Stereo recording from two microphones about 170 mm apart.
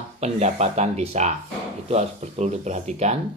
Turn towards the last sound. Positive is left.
turn(degrees=-40)  # may be behind; listen again after turning